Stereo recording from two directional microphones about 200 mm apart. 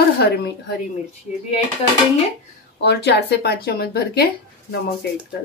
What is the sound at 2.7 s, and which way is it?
Speech, 60° left (ahead or behind).